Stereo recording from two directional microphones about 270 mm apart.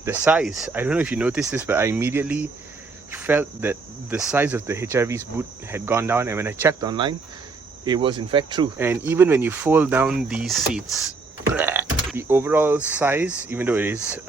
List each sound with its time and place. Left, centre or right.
0.0 s speech: centre